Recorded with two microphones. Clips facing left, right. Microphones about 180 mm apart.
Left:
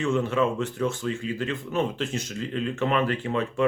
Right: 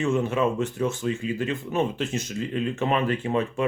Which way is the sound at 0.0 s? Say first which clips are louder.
Right 1 dB; 20° right (ahead or behind).